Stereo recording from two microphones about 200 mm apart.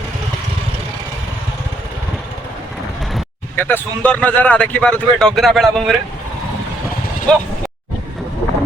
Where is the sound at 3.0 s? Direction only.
Centre (ahead or behind).